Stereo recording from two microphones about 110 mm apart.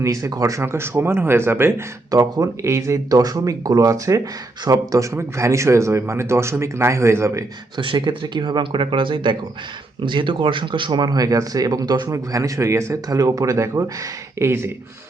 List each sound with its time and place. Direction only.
0.0 s speech: 30° right (ahead or behind)
2.0 s speech: 35° right (ahead or behind)
7.8 s speech: 50° right (ahead or behind); by 14.7 s 25° right (ahead or behind)